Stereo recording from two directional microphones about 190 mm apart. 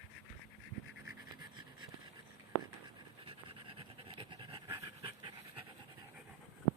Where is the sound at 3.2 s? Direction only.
30° right (ahead or behind).